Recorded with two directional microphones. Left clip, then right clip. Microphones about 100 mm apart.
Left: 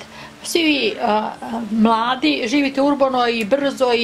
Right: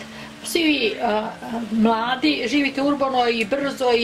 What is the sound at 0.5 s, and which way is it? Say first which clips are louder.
A woman's voice: left 2 dB; 45° left (ahead or behind).